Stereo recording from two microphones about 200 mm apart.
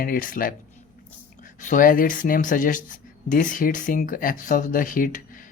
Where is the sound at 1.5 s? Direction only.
40° left (ahead or behind).